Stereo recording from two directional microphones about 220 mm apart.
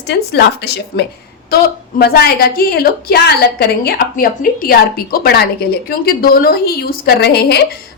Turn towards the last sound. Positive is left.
turn(degrees=45)  # may be behind; listen again after turning